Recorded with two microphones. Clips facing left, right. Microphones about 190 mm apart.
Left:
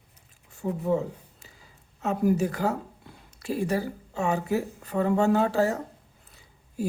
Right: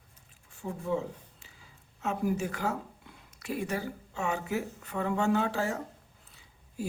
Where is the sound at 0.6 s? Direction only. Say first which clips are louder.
Left 6 dB; 40° left (ahead or behind).